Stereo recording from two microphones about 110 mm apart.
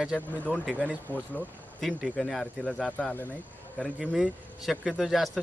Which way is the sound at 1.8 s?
Centre (ahead or behind).